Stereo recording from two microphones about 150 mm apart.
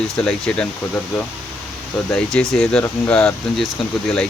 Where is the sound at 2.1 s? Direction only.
5° left (ahead or behind).